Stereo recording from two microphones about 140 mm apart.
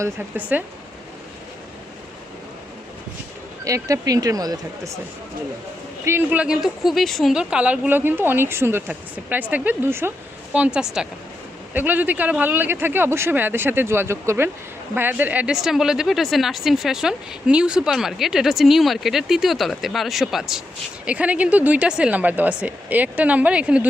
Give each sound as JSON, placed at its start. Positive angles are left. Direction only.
{"t": 0.0, "sound": "speech", "side_deg": -10}
{"t": 3.6, "sound": "speech", "side_deg": -25}
{"t": 6.1, "sound": "speech", "side_deg": -15}